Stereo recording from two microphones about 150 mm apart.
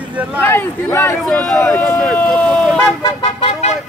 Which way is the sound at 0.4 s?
15° left (ahead or behind).